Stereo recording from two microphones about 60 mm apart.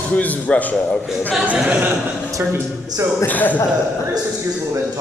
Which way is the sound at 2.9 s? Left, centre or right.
Right.